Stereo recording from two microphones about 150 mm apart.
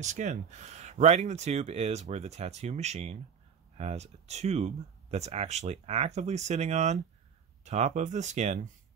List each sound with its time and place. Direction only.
0.0 s speech: 50° right (ahead or behind)